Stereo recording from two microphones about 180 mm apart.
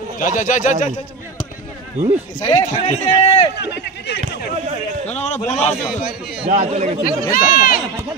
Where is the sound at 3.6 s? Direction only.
70° left (ahead or behind).